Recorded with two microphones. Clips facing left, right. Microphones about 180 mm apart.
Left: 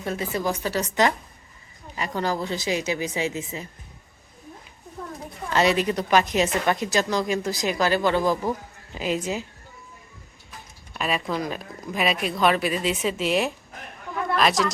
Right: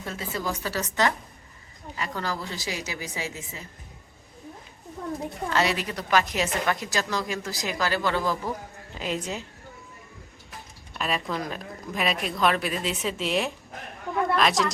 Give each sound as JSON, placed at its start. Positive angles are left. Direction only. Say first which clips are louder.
{"t": 0.2, "sound": "a woman's voice", "louder": "left 1 dB", "side_deg": 15}
{"t": 5.5, "sound": "a woman's voice", "louder": "left 6 dB", "side_deg": 20}
{"t": 9.0, "sound": "speech", "louder": "left 4 dB", "side_deg": 5}
{"t": 10.9, "sound": "speech", "louder": "left 3 dB", "side_deg": 5}